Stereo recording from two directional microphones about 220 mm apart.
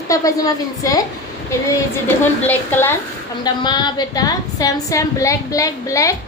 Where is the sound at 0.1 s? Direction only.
15° left (ahead or behind).